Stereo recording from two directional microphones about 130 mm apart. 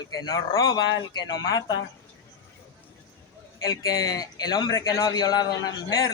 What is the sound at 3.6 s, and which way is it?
A man's voice, 25° left (ahead or behind).